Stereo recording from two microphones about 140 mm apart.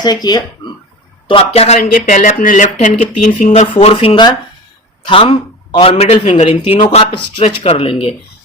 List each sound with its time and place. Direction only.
0.0 s speech: 30° left (ahead or behind)
1.3 s speech: 45° left (ahead or behind)
1.8 s speech: 70° left (ahead or behind)
3.5 s speech: 50° left (ahead or behind)
6.5 s speech: 40° left (ahead or behind)